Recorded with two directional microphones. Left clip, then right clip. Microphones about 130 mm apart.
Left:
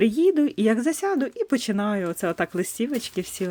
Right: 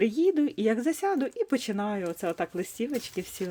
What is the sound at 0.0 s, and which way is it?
Speech, 30° left (ahead or behind).